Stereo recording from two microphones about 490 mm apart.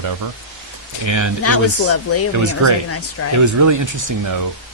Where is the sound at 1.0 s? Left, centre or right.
Right.